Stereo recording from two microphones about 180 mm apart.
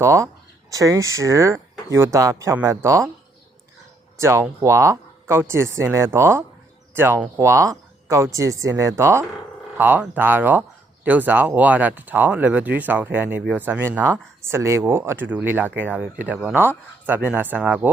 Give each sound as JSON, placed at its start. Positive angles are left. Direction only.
{"t": 0.0, "sound": "speech", "side_deg": -15}
{"t": 4.2, "sound": "speech", "side_deg": -15}